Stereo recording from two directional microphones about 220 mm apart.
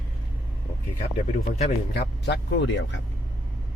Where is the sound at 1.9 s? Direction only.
50° left (ahead or behind).